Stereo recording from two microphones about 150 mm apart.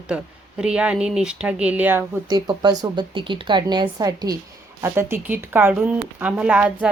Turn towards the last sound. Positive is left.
turn(degrees=-10)  # may be behind; listen again after turning